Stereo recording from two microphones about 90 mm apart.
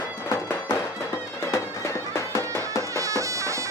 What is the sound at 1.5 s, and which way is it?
Music, 30° left (ahead or behind).